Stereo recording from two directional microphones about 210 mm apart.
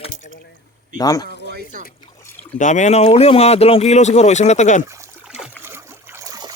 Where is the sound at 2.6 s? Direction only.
35° left (ahead or behind).